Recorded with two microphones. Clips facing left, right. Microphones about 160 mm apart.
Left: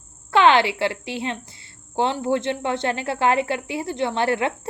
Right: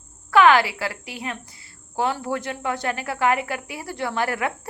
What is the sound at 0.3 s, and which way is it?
A woman's voice, 25° left (ahead or behind).